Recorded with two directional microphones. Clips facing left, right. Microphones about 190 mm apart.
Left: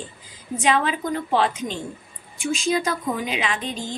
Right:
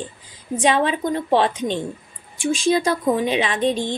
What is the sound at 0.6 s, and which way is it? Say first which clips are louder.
A woman's voice: right 3 dB; 30° right (ahead or behind).